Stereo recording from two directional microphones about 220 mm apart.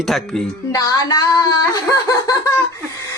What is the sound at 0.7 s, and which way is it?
Speech, 15° left (ahead or behind).